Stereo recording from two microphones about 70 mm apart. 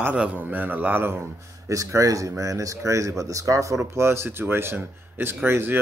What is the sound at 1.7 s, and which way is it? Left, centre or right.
A man's voice, right.